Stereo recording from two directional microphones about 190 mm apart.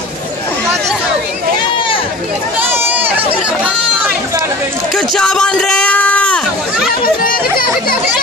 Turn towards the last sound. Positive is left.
turn(degrees=50)  # may be behind; listen again after turning